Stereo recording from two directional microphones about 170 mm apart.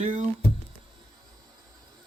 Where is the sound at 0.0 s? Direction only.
45° right (ahead or behind).